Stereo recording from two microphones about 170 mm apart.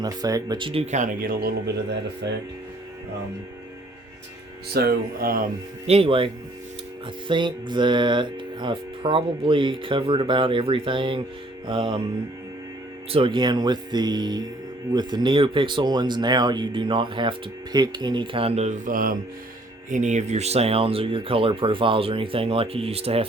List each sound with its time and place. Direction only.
0.0 s speech: 20° right (ahead or behind); by 2.0 s 70° right (ahead or behind)
2.2 s speech: 90° right
4.7 s speech: 65° right (ahead or behind)
5.8 s speech: 35° right (ahead or behind)
13.1 s speech: 30° right (ahead or behind)